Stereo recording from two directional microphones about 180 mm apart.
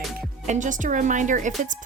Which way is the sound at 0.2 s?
45° right (ahead or behind).